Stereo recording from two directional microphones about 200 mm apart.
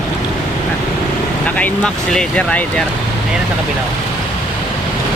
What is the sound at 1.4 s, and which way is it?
Speech, 5° left (ahead or behind).